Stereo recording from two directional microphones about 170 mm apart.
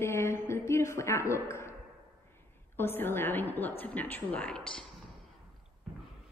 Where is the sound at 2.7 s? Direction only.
15° left (ahead or behind).